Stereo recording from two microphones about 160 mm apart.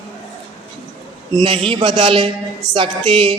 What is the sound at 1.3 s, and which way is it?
A woman's voice, 30° right (ahead or behind).